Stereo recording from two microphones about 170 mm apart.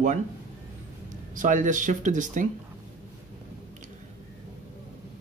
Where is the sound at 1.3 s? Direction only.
50° right (ahead or behind).